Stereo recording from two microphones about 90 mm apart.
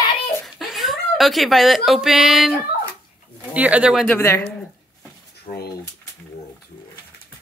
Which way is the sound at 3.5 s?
15° right (ahead or behind).